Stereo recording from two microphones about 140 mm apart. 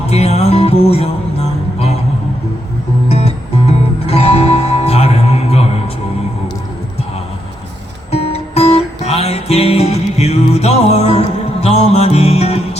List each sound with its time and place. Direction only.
0.0 s music: 50° left (ahead or behind)
3.1 s music: 50° left (ahead or behind)
8.1 s music: 45° left (ahead or behind)